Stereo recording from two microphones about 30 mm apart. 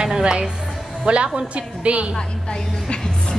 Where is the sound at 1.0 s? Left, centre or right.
Right.